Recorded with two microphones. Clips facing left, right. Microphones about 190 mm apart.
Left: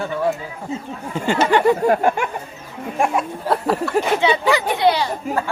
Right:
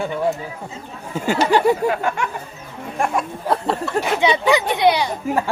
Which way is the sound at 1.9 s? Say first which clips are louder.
Left 5 dB; 40° left (ahead or behind).